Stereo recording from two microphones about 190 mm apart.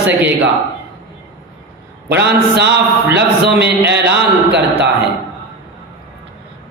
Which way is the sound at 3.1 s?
65° right (ahead or behind).